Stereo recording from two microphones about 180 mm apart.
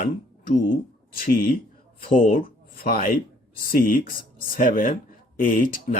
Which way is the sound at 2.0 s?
50° left (ahead or behind).